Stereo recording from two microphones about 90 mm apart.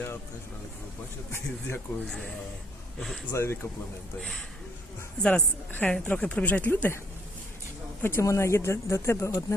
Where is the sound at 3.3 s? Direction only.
30° left (ahead or behind).